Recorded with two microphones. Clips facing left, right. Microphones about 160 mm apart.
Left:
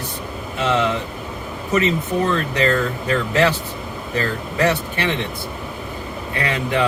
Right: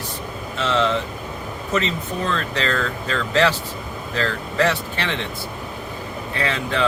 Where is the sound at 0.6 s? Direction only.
15° left (ahead or behind).